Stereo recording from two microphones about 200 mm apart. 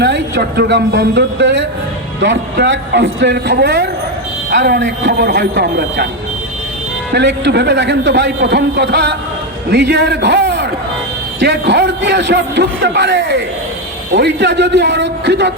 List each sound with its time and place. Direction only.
0.0 s a man's voice: 60° right (ahead or behind)
7.1 s a man's voice: 60° right (ahead or behind)